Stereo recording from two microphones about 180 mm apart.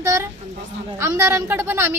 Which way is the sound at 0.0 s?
20° right (ahead or behind).